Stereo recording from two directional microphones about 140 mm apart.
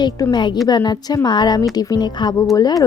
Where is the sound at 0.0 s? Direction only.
30° left (ahead or behind).